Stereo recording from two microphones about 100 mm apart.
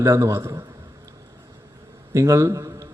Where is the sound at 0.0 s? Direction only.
30° right (ahead or behind).